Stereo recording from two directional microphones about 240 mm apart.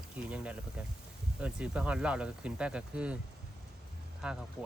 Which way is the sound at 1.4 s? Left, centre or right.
Centre.